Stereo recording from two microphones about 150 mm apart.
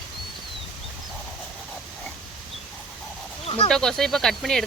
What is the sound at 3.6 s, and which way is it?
Speech, 5° left (ahead or behind).